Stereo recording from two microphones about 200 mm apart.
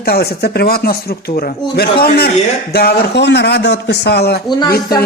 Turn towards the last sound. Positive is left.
turn(degrees=55)  # may be behind; listen again after turning